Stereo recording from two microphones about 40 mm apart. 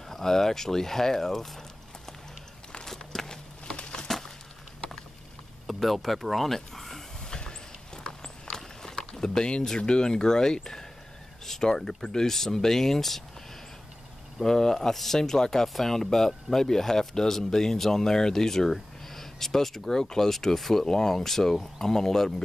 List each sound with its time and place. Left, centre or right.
0.1 s speech: centre
2.8 s a sound: centre; by 4.1 s left
5.7 s speech: centre
7.2 s horse: centre
11.4 s speech: centre
14.4 s speech: centre